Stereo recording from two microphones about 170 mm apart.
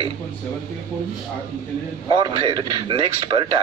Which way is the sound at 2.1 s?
30° right (ahead or behind).